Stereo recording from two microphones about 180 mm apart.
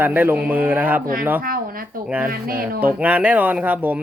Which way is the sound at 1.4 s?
55° right (ahead or behind).